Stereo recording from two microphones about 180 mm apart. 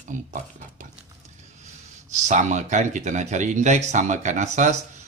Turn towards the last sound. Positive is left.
turn(degrees=-40)  # may be behind; listen again after turning